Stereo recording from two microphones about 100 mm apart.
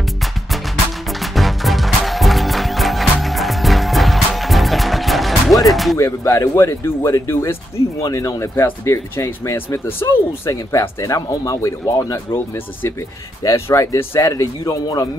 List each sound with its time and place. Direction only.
1.2 s music: centre (ahead or behind)
5.9 s speech: 30° left (ahead or behind)
13.4 s speech: 35° left (ahead or behind)